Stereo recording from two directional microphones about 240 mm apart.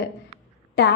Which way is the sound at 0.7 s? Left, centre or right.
Left.